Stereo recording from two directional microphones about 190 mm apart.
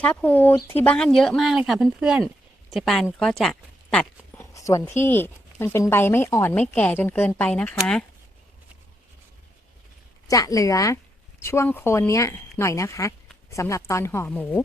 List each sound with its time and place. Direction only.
0.0 s speech: 5° left (ahead or behind)
3.9 s speech: 15° left (ahead or behind)
10.2 s speech: 15° left (ahead or behind)